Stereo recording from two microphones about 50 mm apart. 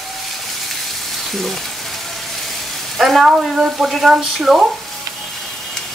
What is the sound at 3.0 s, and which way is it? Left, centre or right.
Speech, centre.